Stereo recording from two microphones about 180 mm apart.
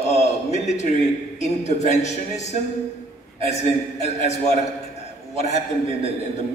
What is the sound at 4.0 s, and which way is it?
Speech, 40° left (ahead or behind).